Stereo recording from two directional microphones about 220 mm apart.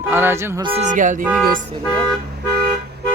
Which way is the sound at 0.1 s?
10° right (ahead or behind).